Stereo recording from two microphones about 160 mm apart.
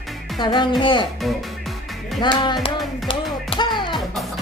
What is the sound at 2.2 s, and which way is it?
Speech, 30° left (ahead or behind).